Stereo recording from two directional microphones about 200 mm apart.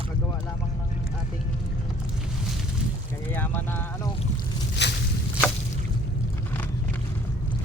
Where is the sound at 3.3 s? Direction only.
10° left (ahead or behind).